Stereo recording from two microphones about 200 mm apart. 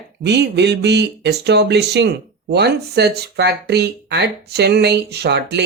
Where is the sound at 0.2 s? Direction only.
55° right (ahead or behind).